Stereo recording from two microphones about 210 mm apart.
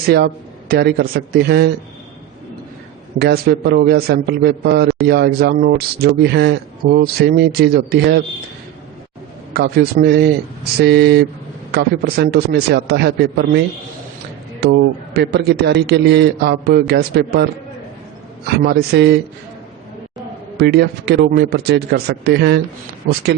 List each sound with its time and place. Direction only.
0.7 s speech: 50° right (ahead or behind)
3.2 s speech: 50° right (ahead or behind)
9.5 s speech: 50° right (ahead or behind)
14.6 s speech: 50° right (ahead or behind)
20.6 s speech: 50° right (ahead or behind)